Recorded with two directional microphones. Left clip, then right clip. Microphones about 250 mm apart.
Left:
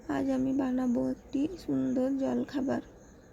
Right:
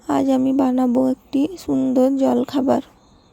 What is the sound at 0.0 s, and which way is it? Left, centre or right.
Speech, right.